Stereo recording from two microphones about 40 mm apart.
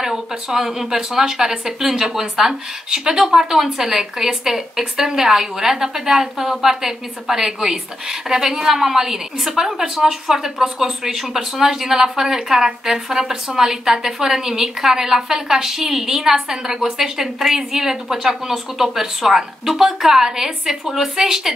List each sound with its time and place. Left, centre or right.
0.0 s a woman's voice: centre